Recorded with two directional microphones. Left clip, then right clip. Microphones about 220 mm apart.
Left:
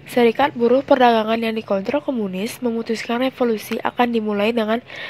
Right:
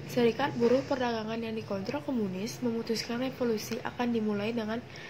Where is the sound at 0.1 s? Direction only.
40° left (ahead or behind).